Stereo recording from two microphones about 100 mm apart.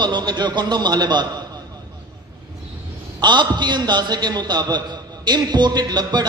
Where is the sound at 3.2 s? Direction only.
50° right (ahead or behind).